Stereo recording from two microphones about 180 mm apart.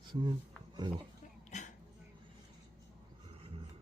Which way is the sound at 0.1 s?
25° right (ahead or behind).